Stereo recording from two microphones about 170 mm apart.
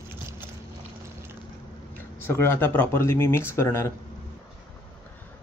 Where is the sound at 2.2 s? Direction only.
10° left (ahead or behind).